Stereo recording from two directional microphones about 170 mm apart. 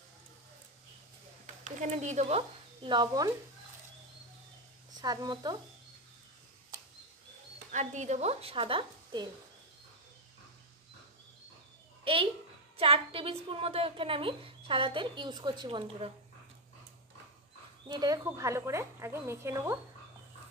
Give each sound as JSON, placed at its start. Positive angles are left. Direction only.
{"t": 1.4, "sound": "speech", "side_deg": -45}
{"t": 5.0, "sound": "speech", "side_deg": -25}
{"t": 7.5, "sound": "speech", "side_deg": -45}
{"t": 12.0, "sound": "a sound", "side_deg": -30}
{"t": 12.7, "sound": "a woman's voice", "side_deg": -35}
{"t": 17.8, "sound": "a woman's voice", "side_deg": -25}